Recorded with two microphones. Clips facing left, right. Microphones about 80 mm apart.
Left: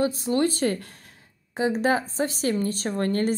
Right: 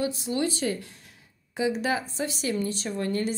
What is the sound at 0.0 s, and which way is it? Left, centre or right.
Speech, left.